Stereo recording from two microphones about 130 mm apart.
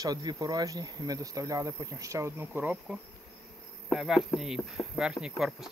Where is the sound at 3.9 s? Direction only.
Centre (ahead or behind).